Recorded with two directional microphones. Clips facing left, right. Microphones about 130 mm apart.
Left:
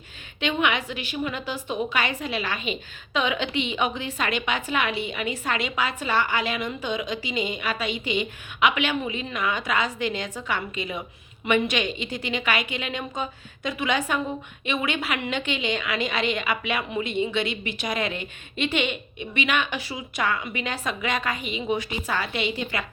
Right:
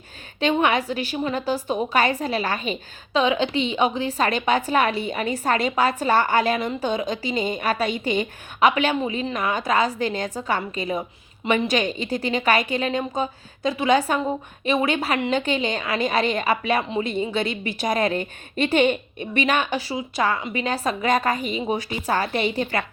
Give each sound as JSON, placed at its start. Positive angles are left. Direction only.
{"t": 0.3, "sound": "a woman's voice", "side_deg": -40}